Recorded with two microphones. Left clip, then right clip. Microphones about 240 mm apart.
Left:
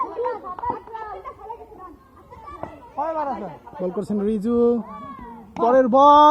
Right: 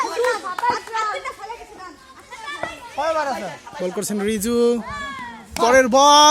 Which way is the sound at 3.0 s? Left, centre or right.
Right.